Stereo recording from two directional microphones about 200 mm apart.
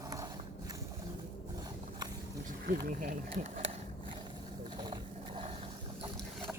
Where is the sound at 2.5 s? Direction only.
45° right (ahead or behind).